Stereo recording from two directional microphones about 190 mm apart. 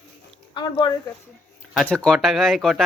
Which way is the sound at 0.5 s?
20° left (ahead or behind).